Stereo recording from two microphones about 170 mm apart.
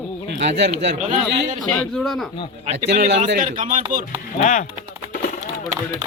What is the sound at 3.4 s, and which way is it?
Speech, 50° right (ahead or behind).